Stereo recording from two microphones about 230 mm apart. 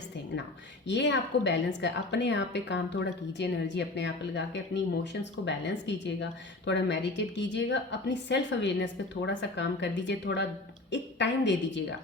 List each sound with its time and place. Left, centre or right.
0.9 s a woman's voice: left